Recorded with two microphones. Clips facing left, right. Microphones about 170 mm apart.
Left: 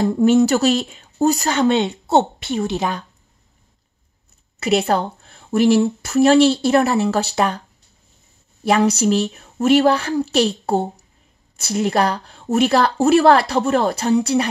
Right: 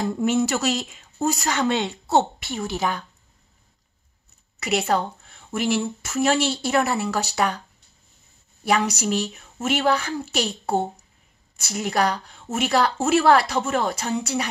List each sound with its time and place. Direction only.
0.0 s a woman's voice: 35° left (ahead or behind)
1.6 s speech: 25° left (ahead or behind)
4.6 s a woman's voice: 30° left (ahead or behind)
8.6 s a woman's voice: 30° left (ahead or behind)